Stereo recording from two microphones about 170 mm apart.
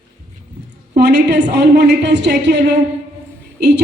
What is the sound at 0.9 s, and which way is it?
A woman's voice, 80° right.